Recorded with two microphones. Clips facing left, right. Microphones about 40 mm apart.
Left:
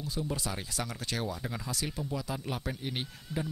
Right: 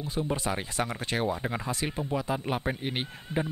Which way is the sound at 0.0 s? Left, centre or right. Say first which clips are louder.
Right 5 dB; right.